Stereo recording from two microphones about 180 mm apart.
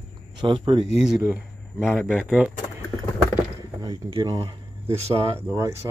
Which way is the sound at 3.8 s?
25° right (ahead or behind).